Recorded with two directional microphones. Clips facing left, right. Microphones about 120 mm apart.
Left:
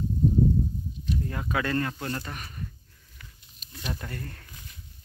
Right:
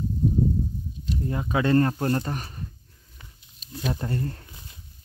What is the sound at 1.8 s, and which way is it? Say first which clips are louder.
Speech: right 8 dB; 35° right (ahead or behind).